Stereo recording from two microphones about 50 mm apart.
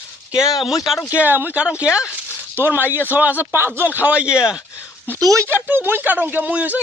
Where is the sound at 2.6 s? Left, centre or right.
Right.